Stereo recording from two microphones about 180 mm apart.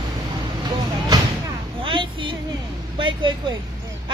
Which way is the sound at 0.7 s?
20° right (ahead or behind).